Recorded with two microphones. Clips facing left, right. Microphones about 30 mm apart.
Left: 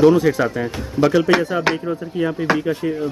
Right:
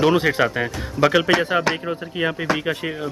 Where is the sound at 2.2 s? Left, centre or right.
Right.